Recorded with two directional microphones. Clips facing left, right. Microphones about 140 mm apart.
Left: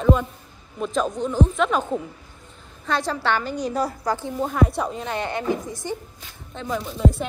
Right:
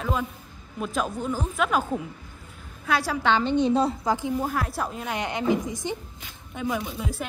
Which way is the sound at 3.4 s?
25° right (ahead or behind).